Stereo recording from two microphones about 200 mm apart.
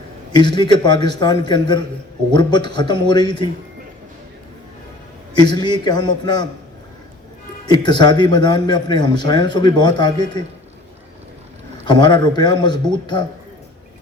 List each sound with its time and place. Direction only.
0.3 s a man's voice: 20° left (ahead or behind)
5.3 s a man's voice: 20° left (ahead or behind)
7.7 s a man's voice: 20° left (ahead or behind)
11.9 s a man's voice: 20° left (ahead or behind)